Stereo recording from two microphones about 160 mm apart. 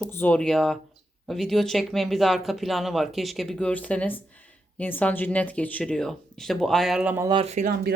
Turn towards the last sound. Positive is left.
turn(degrees=-70)  # may be behind; listen again after turning